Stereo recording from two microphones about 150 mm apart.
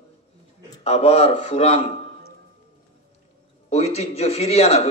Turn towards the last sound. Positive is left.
turn(degrees=45)  # may be behind; listen again after turning